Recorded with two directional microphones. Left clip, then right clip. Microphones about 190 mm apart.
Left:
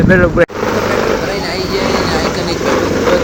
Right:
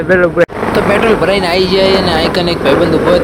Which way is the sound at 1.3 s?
40° right (ahead or behind).